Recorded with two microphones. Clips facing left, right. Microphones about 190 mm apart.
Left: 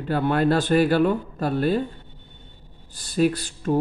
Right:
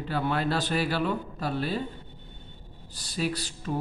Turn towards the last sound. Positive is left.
turn(degrees=50)  # may be behind; listen again after turning